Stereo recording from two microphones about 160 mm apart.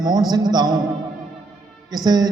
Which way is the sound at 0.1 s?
25° right (ahead or behind).